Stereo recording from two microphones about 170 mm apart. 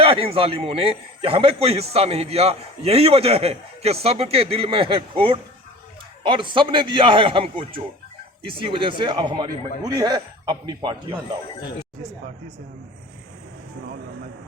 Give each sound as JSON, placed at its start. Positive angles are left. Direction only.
{"t": 0.0, "sound": "a man's voice", "side_deg": -35}